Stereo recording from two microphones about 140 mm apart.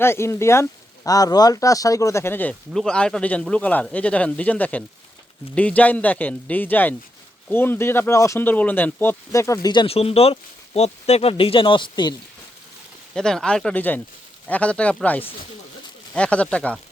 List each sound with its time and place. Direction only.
0.0 s speech: 20° left (ahead or behind)
9.8 s speech: 45° left (ahead or behind)
13.1 s speech: 5° left (ahead or behind)